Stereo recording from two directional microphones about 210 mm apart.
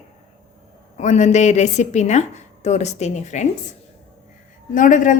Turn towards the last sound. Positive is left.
turn(degrees=40)  # may be behind; listen again after turning